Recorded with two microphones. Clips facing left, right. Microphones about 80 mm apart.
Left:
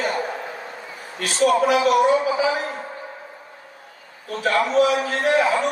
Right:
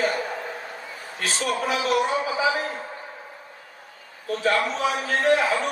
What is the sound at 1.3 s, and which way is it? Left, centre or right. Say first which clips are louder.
Speech: left 9 dB; left.